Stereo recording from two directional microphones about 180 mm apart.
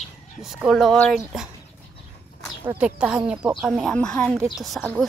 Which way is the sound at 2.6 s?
10° right (ahead or behind).